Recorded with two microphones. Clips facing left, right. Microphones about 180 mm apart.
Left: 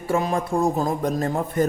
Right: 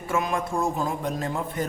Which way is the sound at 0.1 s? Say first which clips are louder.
Left 4 dB; 35° left (ahead or behind).